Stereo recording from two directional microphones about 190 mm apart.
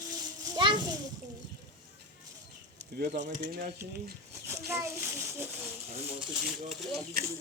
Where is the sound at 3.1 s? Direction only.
45° right (ahead or behind).